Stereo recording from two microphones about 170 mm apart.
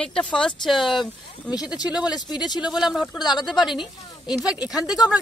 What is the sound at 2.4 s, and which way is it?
Speech, 25° left (ahead or behind).